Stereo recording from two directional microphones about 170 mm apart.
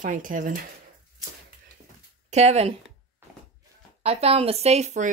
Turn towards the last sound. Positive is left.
turn(degrees=-45)  # may be behind; listen again after turning